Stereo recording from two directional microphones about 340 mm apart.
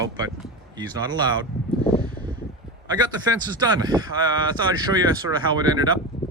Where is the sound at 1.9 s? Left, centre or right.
Centre.